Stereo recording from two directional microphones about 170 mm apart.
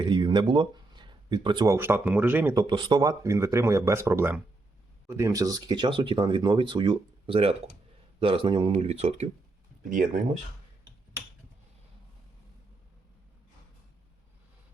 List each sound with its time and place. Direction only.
0.0 s a sound: 25° right (ahead or behind)
1.7 s speech: 15° right (ahead or behind)
2.6 s speech: 25° right (ahead or behind)